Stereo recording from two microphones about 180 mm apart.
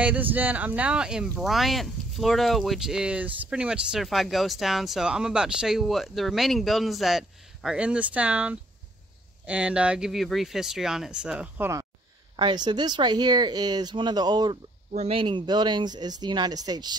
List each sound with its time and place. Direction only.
0.0 s speech: 10° right (ahead or behind)
12.4 s speech: 25° right (ahead or behind)
14.9 s speech: 35° right (ahead or behind)